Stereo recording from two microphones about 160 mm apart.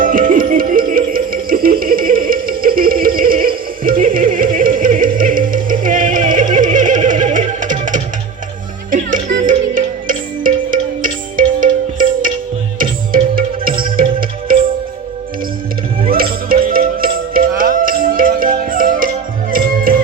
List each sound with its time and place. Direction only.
0.0 s music: 60° right (ahead or behind)
14.2 s tabla: 65° right (ahead or behind)
16.0 s music: 65° right (ahead or behind)